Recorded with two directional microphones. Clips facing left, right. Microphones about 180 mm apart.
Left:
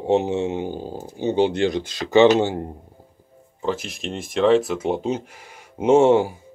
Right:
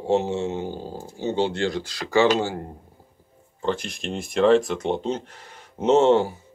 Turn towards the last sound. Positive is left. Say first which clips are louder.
# left 2 dB
turn(degrees=10)  # may be behind; listen again after turning